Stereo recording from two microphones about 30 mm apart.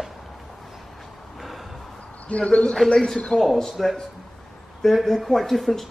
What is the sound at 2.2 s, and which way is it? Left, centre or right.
Speech, left.